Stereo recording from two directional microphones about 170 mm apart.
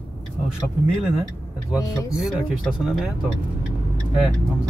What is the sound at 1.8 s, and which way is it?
Speech, 20° left (ahead or behind).